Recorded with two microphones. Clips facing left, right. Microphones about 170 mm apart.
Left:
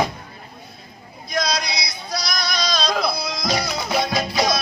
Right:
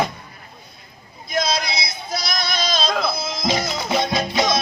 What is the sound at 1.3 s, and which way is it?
Male singing, 25° right (ahead or behind).